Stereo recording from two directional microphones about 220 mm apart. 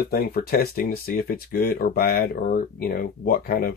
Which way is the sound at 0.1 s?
45° left (ahead or behind).